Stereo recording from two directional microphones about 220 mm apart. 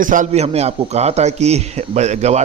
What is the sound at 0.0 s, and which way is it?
A man's voice, 35° right (ahead or behind).